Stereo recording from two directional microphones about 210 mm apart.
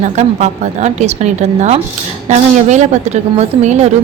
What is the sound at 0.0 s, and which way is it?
A woman's voice, 35° right (ahead or behind).